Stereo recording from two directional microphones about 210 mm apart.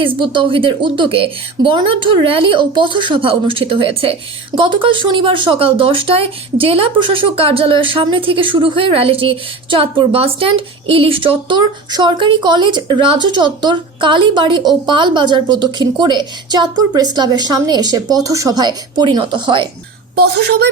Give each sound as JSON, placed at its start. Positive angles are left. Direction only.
{"t": 0.0, "sound": "a woman's voice", "side_deg": -25}
{"t": 20.1, "sound": "a woman's voice", "side_deg": -50}